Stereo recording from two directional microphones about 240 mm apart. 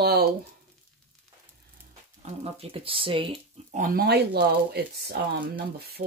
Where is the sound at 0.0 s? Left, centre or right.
Right.